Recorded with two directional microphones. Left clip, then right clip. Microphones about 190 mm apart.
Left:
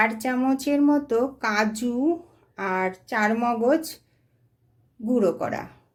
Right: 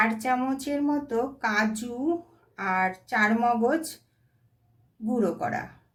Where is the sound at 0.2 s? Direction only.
40° left (ahead or behind).